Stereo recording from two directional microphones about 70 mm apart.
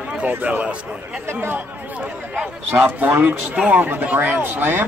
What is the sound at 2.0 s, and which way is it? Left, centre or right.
Speech, centre.